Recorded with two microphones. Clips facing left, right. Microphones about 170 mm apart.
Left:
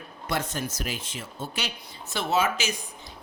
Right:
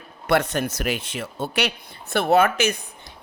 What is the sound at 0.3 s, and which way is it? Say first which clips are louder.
Speech: right 9 dB; 65° right (ahead or behind).